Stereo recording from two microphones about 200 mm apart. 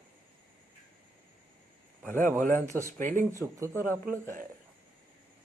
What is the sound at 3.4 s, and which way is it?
Speech, 15° right (ahead or behind).